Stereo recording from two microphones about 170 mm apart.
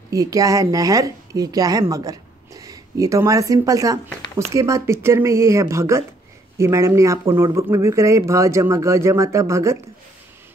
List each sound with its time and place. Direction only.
0.1 s speech: 20° right (ahead or behind)